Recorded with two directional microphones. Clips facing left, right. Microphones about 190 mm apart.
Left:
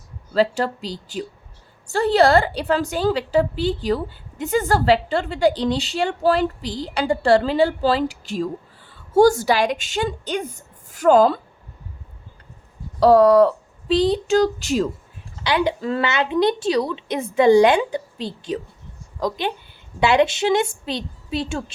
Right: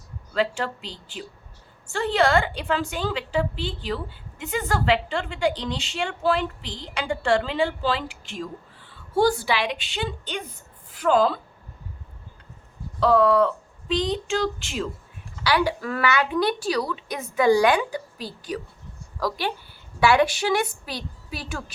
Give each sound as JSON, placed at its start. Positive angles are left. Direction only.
{"t": 0.3, "sound": "a woman's voice", "side_deg": 35}
{"t": 13.0, "sound": "a woman's voice", "side_deg": 40}
{"t": 15.4, "sound": "a woman's voice", "side_deg": 20}